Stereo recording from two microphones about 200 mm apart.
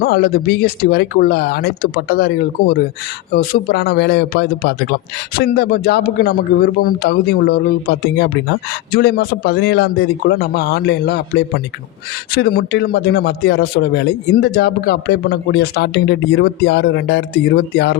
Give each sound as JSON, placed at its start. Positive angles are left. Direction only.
{"t": 0.0, "sound": "speech", "side_deg": 50}